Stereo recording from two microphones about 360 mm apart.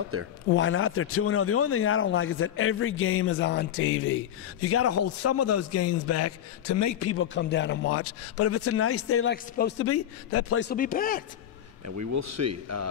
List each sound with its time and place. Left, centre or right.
0.1 s speech: right
0.5 s speech: left
11.8 s speech: right